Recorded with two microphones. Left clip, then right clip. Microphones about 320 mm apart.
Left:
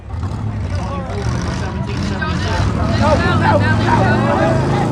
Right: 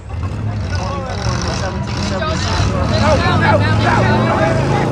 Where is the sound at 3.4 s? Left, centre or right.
Centre.